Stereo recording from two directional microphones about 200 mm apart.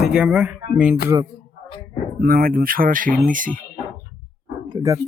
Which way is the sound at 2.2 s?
45° right (ahead or behind).